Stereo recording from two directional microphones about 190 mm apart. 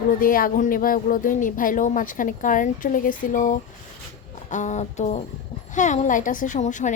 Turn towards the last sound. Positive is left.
turn(degrees=40)  # may be behind; listen again after turning